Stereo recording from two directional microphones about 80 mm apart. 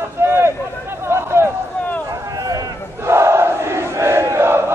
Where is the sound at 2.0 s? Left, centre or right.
Right.